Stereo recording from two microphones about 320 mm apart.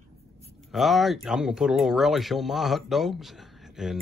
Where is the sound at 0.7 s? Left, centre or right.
Centre.